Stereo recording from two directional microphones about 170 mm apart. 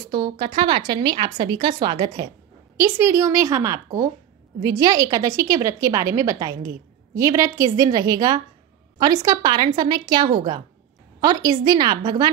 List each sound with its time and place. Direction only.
0.0 s a woman's voice: 25° right (ahead or behind)
2.8 s a woman's voice: 15° right (ahead or behind)